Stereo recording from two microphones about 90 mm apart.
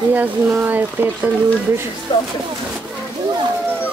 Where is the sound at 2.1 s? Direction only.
55° left (ahead or behind).